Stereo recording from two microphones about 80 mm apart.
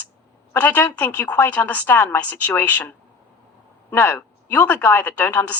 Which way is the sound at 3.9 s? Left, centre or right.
Left.